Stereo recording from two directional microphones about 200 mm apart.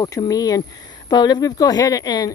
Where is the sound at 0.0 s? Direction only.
20° left (ahead or behind).